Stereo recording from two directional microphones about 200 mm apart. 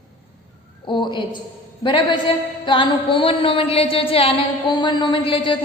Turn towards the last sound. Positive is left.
turn(degrees=25)  # may be behind; listen again after turning